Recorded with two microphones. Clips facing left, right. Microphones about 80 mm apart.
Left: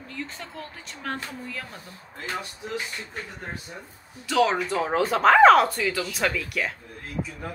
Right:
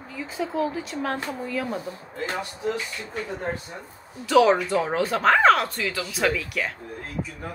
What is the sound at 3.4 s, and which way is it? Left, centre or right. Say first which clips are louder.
Speech: right 7 dB; right.